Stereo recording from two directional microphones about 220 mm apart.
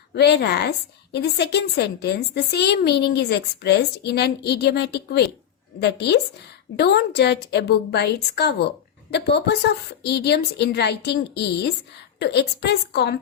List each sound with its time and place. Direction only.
0.1 s a woman's voice: 50° left (ahead or behind)